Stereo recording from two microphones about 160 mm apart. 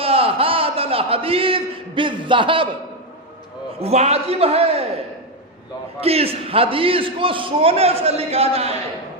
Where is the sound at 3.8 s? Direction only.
40° right (ahead or behind).